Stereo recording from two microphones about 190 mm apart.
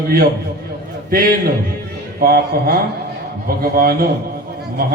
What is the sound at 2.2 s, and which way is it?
Mantra, 55° right (ahead or behind).